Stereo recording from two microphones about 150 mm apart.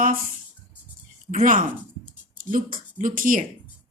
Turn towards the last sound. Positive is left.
turn(degrees=-65)  # may be behind; listen again after turning